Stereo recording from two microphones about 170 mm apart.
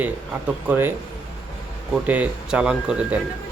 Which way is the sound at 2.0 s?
10° right (ahead or behind).